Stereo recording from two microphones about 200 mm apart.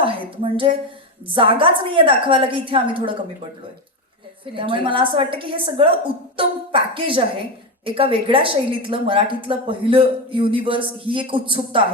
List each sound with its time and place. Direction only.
0.0 s a sound: 25° right (ahead or behind)
1.3 s a woman's voice: 25° right (ahead or behind)
4.5 s a woman's voice: 25° right (ahead or behind)